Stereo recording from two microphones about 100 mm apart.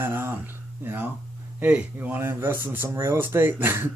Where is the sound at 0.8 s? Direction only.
20° right (ahead or behind).